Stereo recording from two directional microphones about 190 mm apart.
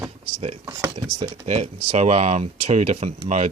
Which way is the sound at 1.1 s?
30° right (ahead or behind).